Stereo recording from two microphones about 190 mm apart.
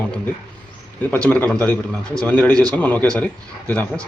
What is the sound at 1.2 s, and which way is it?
A man's voice, 5° left (ahead or behind).